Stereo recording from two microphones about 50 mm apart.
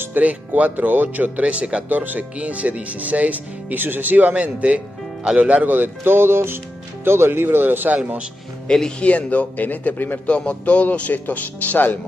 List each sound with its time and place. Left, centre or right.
0.2 s speech: right
1.9 s speech: right
5.7 s speech: right
8.6 s speech: centre
9.1 s speech: left
10.2 s speech: left